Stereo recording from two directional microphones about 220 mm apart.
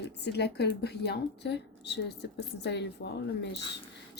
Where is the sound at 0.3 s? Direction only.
50° left (ahead or behind).